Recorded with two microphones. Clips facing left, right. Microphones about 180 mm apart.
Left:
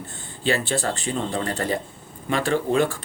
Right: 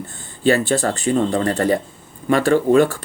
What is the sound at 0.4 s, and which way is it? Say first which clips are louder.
Speech: right 7 dB; 45° right (ahead or behind).